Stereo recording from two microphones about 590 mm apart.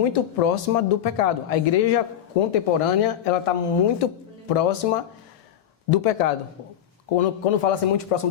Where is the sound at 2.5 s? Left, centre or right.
Left.